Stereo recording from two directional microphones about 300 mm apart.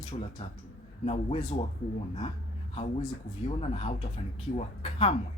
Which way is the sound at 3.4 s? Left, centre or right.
Centre.